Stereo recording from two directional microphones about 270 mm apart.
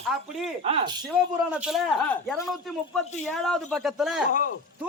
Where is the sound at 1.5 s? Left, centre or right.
Centre.